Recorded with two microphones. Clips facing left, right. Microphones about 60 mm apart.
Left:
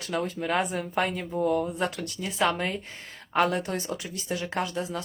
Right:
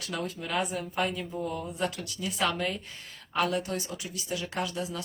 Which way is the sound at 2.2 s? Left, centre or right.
Left.